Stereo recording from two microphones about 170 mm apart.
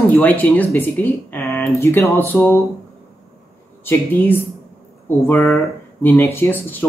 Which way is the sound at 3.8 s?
15° left (ahead or behind).